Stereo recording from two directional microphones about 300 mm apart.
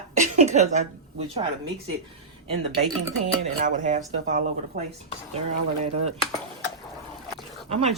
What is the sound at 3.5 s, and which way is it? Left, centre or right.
Speech, right.